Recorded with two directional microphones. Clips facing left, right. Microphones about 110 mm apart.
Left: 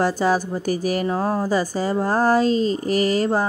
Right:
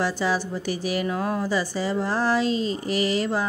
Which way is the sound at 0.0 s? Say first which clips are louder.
Left 5 dB; 45° left (ahead or behind).